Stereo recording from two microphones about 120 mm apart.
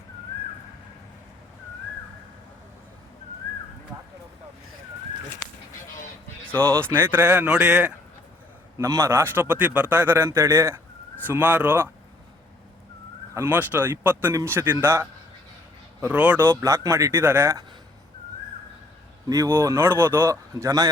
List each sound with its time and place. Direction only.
6.8 s speech: 15° right (ahead or behind)
8.8 s a man's voice: 25° right (ahead or behind)
13.3 s speech: 20° right (ahead or behind)
16.5 s a man's voice: 25° right (ahead or behind)
19.3 s a man's voice: 25° right (ahead or behind)